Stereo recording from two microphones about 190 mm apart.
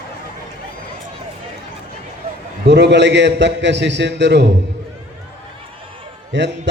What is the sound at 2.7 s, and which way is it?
A man's voice, 65° right (ahead or behind).